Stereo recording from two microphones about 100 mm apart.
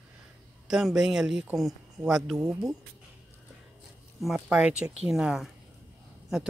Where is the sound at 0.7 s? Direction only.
5° right (ahead or behind).